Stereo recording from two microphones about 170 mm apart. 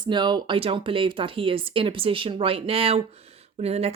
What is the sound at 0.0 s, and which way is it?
Speech, 25° right (ahead or behind).